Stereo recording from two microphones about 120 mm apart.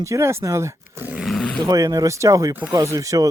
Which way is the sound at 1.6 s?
30° right (ahead or behind).